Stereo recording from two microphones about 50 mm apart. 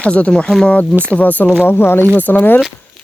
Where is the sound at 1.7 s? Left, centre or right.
Left.